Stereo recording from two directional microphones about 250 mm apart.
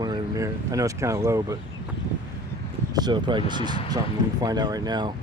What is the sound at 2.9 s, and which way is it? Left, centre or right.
Speech, centre.